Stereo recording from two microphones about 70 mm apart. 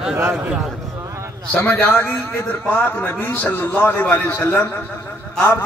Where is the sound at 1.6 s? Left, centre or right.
Left.